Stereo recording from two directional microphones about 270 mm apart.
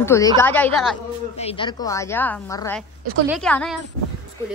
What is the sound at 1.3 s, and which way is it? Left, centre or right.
A woman's voice, centre.